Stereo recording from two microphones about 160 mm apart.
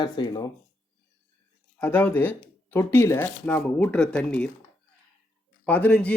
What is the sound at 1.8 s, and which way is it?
Speech, 10° left (ahead or behind).